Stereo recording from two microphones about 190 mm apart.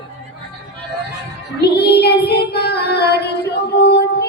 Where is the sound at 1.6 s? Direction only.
60° left (ahead or behind).